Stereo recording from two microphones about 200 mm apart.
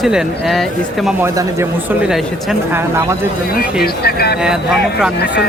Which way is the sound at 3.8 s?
50° left (ahead or behind).